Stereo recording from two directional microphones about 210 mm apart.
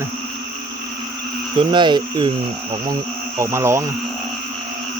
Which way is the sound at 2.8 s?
20° right (ahead or behind).